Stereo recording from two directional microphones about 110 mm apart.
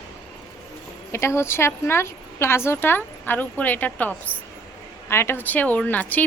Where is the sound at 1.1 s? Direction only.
25° left (ahead or behind).